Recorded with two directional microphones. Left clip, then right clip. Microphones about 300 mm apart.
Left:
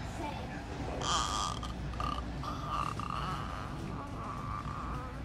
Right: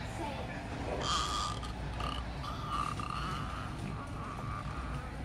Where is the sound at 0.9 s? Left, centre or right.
Centre.